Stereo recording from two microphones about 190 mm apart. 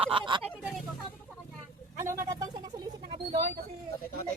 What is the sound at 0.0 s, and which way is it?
Speech, 30° right (ahead or behind).